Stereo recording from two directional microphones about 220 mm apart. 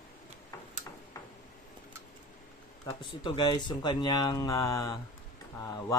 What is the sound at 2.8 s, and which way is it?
Speech, 20° left (ahead or behind).